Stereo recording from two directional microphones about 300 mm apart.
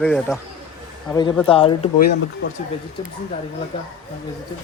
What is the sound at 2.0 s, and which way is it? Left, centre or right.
Speech, left.